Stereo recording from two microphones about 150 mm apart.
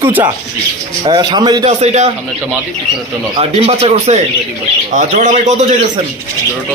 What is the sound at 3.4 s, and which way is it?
A man's voice, 40° right (ahead or behind).